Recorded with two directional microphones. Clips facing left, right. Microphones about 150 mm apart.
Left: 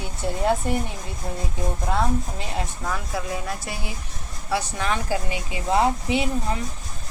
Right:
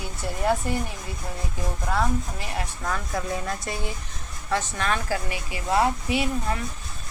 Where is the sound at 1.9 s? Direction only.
20° left (ahead or behind).